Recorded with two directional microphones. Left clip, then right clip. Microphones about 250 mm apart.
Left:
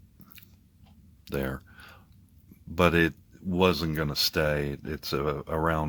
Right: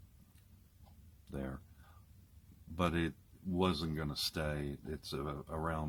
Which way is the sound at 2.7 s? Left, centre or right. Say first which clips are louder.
Left 13 dB; left.